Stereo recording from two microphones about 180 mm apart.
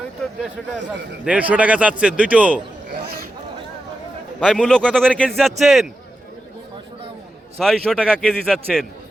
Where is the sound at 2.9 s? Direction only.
65° right (ahead or behind).